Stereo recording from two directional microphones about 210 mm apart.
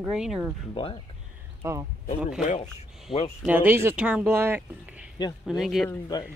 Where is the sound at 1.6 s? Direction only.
15° right (ahead or behind).